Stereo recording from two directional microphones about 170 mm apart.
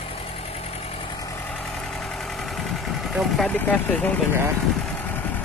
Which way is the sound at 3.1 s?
5° left (ahead or behind).